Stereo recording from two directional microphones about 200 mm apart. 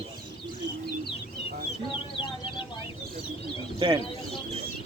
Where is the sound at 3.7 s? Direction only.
20° right (ahead or behind).